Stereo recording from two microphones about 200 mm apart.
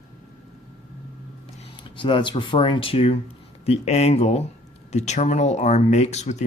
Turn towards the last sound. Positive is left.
turn(degrees=35)  # may be behind; listen again after turning